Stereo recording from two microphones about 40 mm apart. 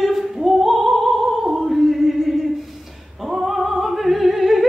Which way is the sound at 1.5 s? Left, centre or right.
Centre.